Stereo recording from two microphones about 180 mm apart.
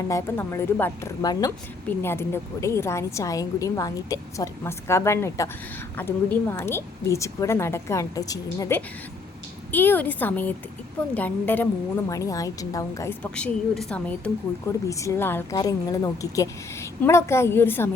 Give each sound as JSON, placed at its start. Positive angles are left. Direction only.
{"t": 0.1, "sound": "a woman's voice", "side_deg": 15}
{"t": 13.3, "sound": "speech", "side_deg": 5}
{"t": 14.8, "sound": "a woman's voice", "side_deg": 15}